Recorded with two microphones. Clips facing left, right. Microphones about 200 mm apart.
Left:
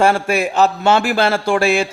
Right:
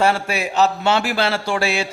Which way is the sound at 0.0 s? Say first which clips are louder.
Left 4 dB; 50° left (ahead or behind).